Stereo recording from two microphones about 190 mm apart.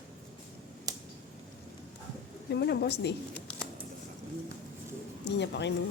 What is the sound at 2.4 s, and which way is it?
Speech, 60° left (ahead or behind).